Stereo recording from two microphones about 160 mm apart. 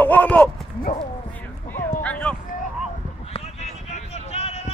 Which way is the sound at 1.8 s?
10° left (ahead or behind).